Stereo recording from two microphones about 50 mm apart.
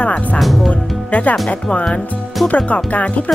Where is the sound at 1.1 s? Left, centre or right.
Left.